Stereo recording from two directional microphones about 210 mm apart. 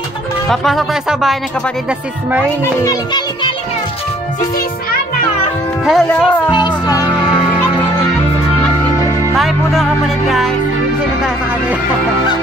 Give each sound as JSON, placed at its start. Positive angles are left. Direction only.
{"t": 0.5, "sound": "speech", "side_deg": 0}
{"t": 2.8, "sound": "a child's voice", "side_deg": 20}
{"t": 5.9, "sound": "speech", "side_deg": 0}
{"t": 6.5, "sound": "music", "side_deg": 20}
{"t": 9.3, "sound": "music", "side_deg": 0}